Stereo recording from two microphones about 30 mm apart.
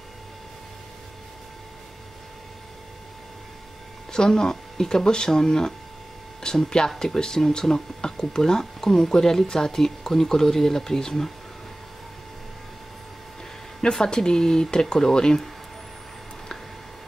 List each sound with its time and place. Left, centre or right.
4.1 s speech: left
13.9 s speech: left